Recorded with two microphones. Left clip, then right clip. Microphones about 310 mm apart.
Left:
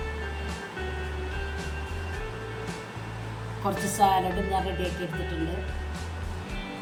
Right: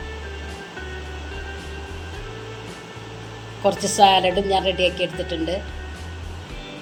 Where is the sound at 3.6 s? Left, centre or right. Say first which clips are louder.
Right 8 dB; left.